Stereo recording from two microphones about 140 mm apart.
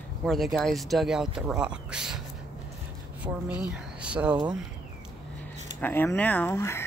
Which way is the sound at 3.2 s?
25° right (ahead or behind).